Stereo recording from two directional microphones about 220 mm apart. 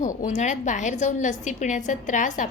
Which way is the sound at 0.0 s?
35° left (ahead or behind).